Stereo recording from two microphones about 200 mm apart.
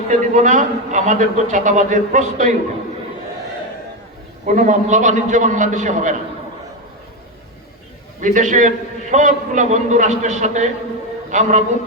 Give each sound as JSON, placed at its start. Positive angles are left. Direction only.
{"t": 0.1, "sound": "a man's voice", "side_deg": -40}
{"t": 4.4, "sound": "a man's voice", "side_deg": -40}
{"t": 8.2, "sound": "a man's voice", "side_deg": -40}